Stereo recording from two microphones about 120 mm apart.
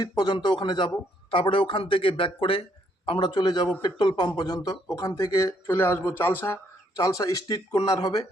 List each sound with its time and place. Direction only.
0.2 s speech: 40° left (ahead or behind)